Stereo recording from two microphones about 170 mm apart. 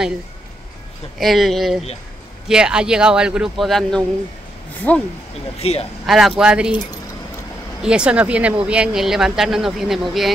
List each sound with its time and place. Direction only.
1.2 s speech: centre (ahead or behind)
5.6 s speech: 35° left (ahead or behind)
6.0 s speech: centre (ahead or behind)
7.8 s speech: 5° right (ahead or behind)